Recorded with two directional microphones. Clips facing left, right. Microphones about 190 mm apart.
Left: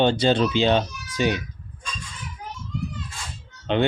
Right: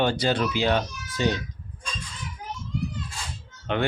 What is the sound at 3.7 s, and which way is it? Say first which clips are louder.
Speech: left 4 dB; 20° left (ahead or behind).